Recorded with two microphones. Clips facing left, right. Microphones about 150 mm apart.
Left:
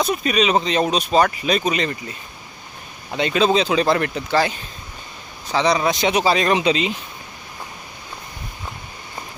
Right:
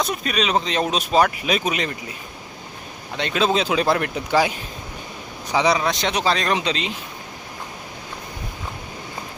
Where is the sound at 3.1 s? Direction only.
Centre (ahead or behind).